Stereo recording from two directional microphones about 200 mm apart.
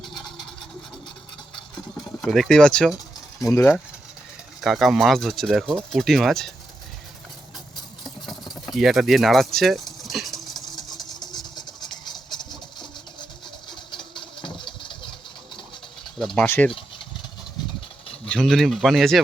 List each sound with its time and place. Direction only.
2.2 s speech: centre (ahead or behind)
4.6 s speech: centre (ahead or behind)
8.7 s a sound: centre (ahead or behind)
13.7 s engine: 25° left (ahead or behind)
16.1 s speech: 5° left (ahead or behind)
18.3 s speech: 5° left (ahead or behind)